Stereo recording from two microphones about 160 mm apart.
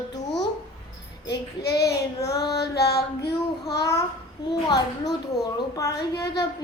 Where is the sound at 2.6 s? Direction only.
90° left.